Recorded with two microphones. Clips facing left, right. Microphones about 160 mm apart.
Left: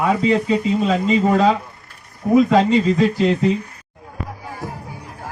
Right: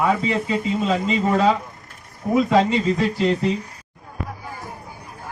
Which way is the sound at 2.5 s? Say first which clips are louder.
Left 3 dB; 25° left (ahead or behind).